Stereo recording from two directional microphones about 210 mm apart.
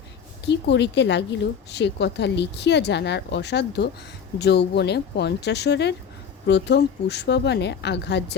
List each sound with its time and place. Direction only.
0.4 s a woman's voice: 55° left (ahead or behind)